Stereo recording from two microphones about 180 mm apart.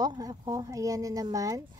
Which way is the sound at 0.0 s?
20° right (ahead or behind).